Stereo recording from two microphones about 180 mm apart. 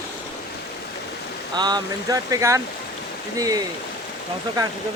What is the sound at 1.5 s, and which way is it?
Speech, 25° right (ahead or behind).